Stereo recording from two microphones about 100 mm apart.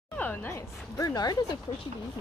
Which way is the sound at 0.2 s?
20° left (ahead or behind).